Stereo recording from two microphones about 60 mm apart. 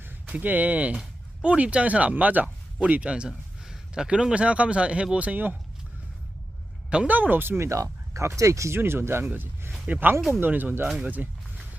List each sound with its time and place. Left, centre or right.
0.3 s speech: right
7.1 s speech: right
7.7 s speech: right
8.8 s speech: right
9.2 s speech: right
10.2 s speech: centre
10.4 s speech: right